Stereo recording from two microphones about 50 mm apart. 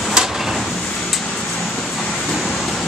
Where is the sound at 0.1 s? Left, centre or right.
Centre.